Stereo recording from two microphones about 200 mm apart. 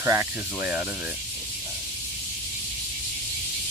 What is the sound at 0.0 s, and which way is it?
Speech, 10° right (ahead or behind).